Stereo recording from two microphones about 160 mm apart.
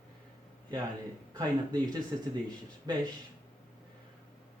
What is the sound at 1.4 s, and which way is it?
A man's voice, 25° right (ahead or behind).